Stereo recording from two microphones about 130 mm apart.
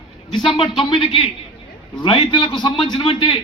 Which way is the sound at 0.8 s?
40° left (ahead or behind).